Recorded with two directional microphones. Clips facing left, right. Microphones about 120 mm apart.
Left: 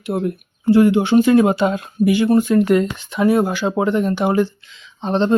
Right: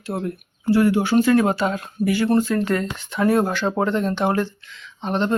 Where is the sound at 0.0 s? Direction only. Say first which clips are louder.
Left 5 dB; 20° left (ahead or behind).